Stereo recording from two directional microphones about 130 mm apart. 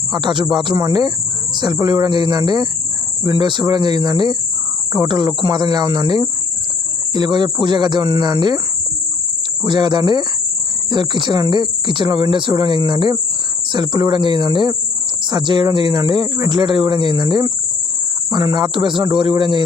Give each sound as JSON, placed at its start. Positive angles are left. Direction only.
{"t": 0.1, "sound": "speech", "side_deg": -35}
{"t": 9.6, "sound": "speech", "side_deg": -35}